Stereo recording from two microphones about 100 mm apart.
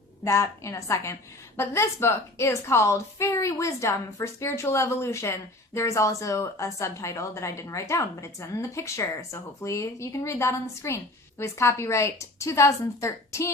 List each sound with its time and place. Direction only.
0.3 s a woman's voice: 30° left (ahead or behind)